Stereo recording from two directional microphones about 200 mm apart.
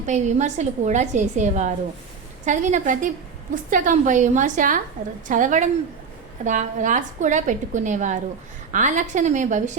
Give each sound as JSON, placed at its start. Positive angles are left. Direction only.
{"t": 0.0, "sound": "a woman's voice", "side_deg": -35}